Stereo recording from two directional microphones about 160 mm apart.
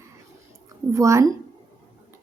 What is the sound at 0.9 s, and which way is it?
Speech, 20° right (ahead or behind).